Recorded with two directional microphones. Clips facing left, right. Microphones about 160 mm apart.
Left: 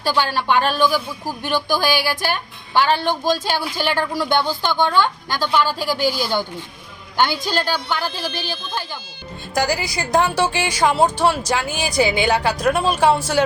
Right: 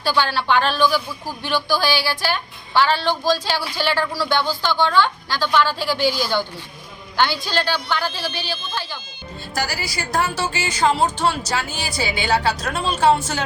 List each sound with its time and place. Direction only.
0.0 s a woman's voice: 15° left (ahead or behind)
1.8 s speech: 50° left (ahead or behind)
2.3 s a woman's voice: 15° left (ahead or behind)
3.1 s speech: 50° left (ahead or behind)
3.5 s a woman's voice: 15° left (ahead or behind)
8.3 s speech: 45° left (ahead or behind)
9.6 s a woman's voice: 15° left (ahead or behind)